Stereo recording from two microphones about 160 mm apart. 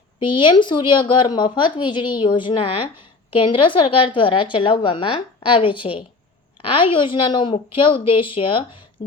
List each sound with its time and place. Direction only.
0.2 s a woman's voice: 30° left (ahead or behind)